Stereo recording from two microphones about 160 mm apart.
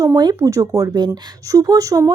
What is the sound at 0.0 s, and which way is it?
Speech, 25° right (ahead or behind).